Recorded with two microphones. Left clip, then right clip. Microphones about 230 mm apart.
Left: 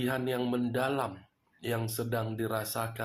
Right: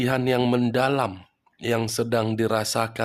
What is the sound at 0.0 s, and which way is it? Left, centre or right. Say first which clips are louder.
Speech: right 9 dB; right.